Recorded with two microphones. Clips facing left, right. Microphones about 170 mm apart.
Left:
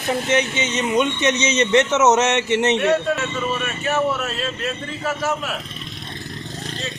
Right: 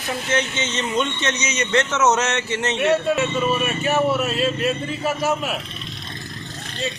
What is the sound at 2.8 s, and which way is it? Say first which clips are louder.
A man's voice: even; 5° right (ahead or behind).